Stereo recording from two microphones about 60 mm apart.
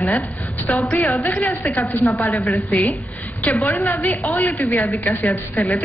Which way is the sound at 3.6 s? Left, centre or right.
Left.